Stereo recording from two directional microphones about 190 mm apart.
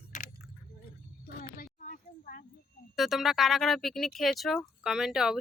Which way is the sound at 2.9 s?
Centre (ahead or behind).